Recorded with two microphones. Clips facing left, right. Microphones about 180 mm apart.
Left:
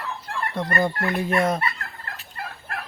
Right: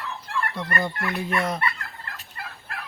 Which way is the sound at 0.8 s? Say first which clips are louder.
Left 4 dB; 50° left (ahead or behind).